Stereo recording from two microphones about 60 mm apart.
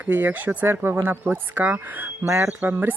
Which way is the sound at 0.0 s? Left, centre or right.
Right.